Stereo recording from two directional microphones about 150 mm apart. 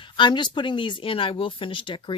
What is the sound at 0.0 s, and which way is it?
Speech, 30° left (ahead or behind).